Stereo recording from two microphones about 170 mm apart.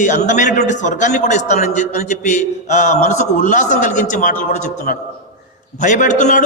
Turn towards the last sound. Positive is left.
turn(degrees=45)  # may be behind; listen again after turning